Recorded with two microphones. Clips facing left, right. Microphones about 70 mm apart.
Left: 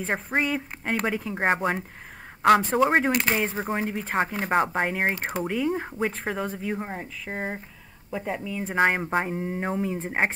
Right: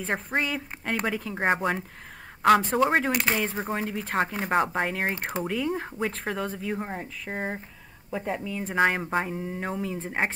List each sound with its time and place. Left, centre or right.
0.0 s speech: centre
3.1 s speech: centre
8.7 s speech: centre